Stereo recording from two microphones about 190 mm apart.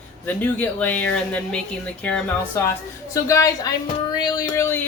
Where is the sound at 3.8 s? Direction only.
25° left (ahead or behind).